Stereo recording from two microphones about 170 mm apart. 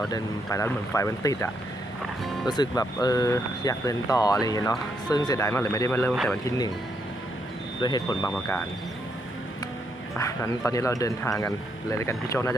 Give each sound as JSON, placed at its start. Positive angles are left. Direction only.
{"t": 0.1, "sound": "speech", "side_deg": 20}
{"t": 2.5, "sound": "speech", "side_deg": 25}
{"t": 7.8, "sound": "speech", "side_deg": 25}
{"t": 10.2, "sound": "speech", "side_deg": 20}